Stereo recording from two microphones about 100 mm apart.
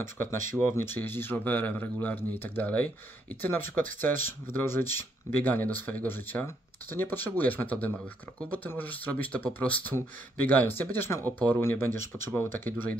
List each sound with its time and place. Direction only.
0.0 s speech: 25° left (ahead or behind)